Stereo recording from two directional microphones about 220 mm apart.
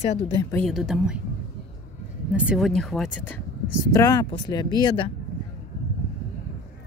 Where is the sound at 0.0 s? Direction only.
25° left (ahead or behind).